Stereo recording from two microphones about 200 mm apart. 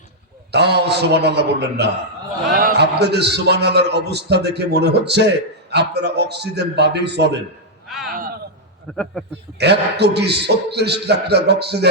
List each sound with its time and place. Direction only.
0.5 s a man's voice: 55° right (ahead or behind)
7.9 s a man's voice: centre (ahead or behind)
9.6 s a man's voice: 55° right (ahead or behind)